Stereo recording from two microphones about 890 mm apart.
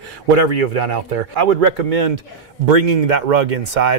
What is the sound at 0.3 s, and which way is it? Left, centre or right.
Speech, right.